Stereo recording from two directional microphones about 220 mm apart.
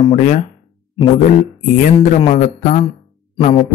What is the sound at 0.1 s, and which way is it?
Speech, 35° left (ahead or behind).